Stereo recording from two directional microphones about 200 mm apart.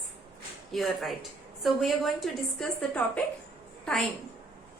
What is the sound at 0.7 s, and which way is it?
A woman's voice, centre (ahead or behind).